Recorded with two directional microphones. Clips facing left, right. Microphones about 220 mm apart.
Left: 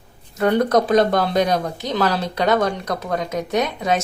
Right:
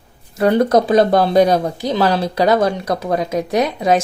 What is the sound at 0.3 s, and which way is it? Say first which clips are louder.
Speech: right 3 dB; 30° right (ahead or behind).